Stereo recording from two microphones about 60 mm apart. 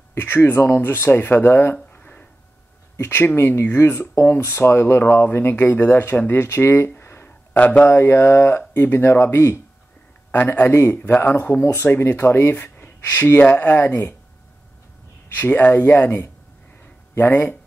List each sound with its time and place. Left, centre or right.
0.1 s speech: left
1.9 s a sound: left
3.0 s speech: left
7.0 s a sound: left
7.5 s speech: left
7.8 s speech: left
10.3 s speech: left
11.6 s speech: left
15.2 s speech: left